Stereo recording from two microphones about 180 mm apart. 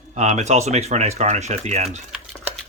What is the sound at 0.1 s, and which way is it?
Speech, 40° right (ahead or behind).